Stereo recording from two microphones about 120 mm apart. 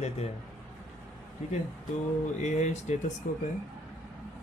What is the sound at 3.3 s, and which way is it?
Speech, 90° left.